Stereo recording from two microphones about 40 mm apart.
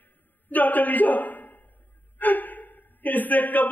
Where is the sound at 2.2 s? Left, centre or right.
Left.